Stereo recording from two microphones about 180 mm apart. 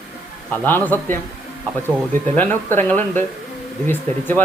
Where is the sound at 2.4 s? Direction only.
10° left (ahead or behind).